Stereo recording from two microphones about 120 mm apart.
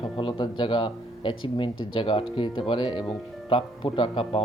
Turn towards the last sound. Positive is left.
turn(degrees=45)  # may be behind; listen again after turning